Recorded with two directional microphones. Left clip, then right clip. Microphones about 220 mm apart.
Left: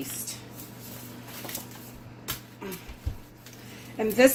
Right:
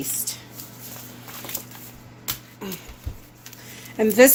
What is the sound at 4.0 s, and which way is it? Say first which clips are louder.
Dishes: right 6 dB; 50° right (ahead or behind).